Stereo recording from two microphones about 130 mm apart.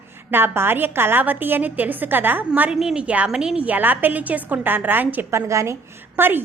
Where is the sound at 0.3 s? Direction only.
15° right (ahead or behind).